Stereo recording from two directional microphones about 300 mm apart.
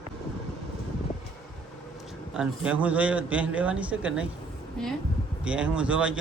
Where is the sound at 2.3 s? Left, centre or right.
Centre.